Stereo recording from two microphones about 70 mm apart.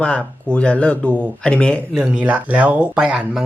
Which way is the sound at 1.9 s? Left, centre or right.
Centre.